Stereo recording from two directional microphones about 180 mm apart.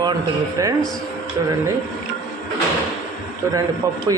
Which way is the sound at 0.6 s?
20° right (ahead or behind).